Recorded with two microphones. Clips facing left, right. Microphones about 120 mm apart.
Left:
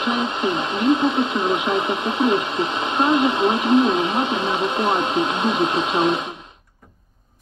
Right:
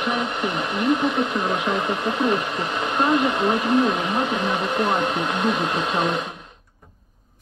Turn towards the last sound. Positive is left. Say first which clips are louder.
# left 3 dB
turn(degrees=20)  # may be behind; listen again after turning